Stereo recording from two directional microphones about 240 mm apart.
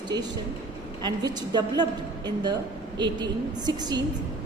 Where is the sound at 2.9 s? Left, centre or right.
Centre.